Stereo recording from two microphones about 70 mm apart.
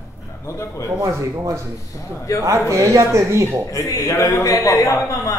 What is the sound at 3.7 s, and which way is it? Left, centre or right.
Speech, left.